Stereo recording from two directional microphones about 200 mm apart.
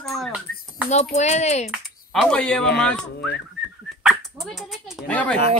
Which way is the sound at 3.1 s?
55° left (ahead or behind).